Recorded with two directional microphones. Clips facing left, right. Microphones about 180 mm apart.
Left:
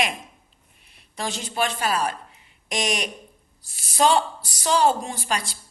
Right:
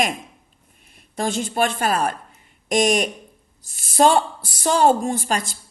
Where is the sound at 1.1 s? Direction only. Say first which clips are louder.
Right 5 dB; 50° right (ahead or behind).